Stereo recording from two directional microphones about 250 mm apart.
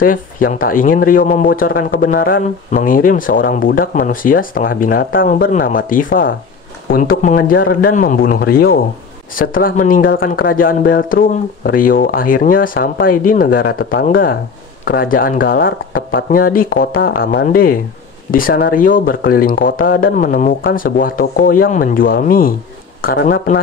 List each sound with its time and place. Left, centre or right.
0.0 s speech: left